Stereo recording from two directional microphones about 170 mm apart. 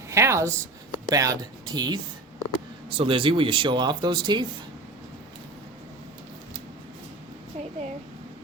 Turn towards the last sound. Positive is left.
turn(degrees=-45)  # may be behind; listen again after turning